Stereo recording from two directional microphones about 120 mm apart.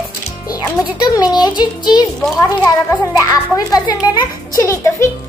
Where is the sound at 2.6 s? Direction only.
25° left (ahead or behind).